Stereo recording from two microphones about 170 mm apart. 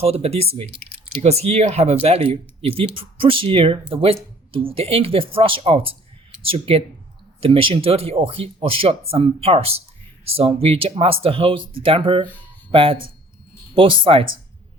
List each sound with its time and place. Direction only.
0.0 s speech: 35° right (ahead or behind)